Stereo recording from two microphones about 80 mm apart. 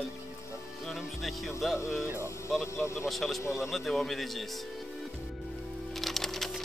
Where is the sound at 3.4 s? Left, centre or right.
Left.